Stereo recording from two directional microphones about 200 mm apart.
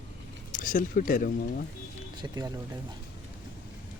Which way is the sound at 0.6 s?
40° left (ahead or behind).